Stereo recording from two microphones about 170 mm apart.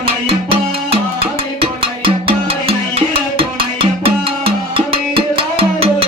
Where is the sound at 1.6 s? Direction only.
30° right (ahead or behind).